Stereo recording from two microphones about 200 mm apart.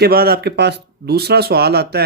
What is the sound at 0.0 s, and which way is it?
Speech, 50° right (ahead or behind).